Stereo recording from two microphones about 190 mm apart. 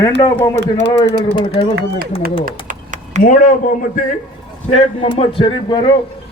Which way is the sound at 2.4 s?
45° right (ahead or behind).